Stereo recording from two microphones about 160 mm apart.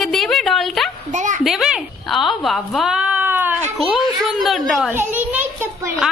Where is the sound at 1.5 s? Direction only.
5° right (ahead or behind).